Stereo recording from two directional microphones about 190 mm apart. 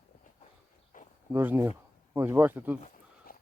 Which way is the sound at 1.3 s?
10° right (ahead or behind).